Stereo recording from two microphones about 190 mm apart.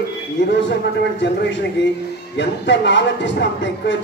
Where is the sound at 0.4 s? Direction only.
70° left (ahead or behind).